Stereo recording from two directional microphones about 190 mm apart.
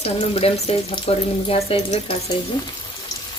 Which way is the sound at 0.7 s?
30° left (ahead or behind).